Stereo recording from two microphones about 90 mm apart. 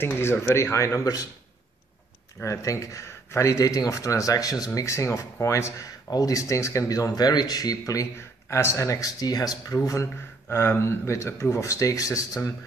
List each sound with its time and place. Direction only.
0.0 s speech: 25° left (ahead or behind)
2.4 s speech: 35° left (ahead or behind)
4.6 s speech: 35° left (ahead or behind)
6.0 s speech: 45° left (ahead or behind)
10.5 s speech: 25° left (ahead or behind)